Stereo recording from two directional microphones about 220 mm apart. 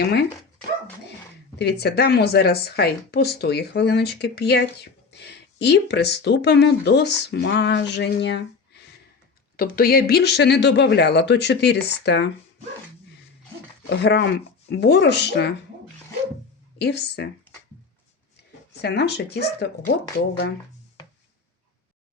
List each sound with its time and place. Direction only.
0.0 s a woman's voice: 50° left (ahead or behind)
1.5 s a woman's voice: 50° left (ahead or behind)
13.9 s a woman's voice: 50° left (ahead or behind)
16.7 s a woman's voice: 50° left (ahead or behind)
18.8 s a woman's voice: 50° left (ahead or behind)